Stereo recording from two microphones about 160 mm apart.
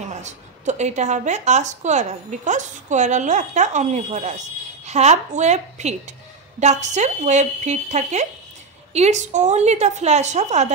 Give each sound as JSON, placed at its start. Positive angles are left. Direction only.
{"t": 0.1, "sound": "a woman's voice", "side_deg": -45}